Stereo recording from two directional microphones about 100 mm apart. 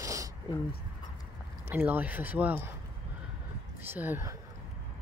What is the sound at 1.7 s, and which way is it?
Speech, 20° right (ahead or behind).